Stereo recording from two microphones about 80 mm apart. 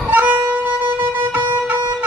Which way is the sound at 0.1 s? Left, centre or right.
Right.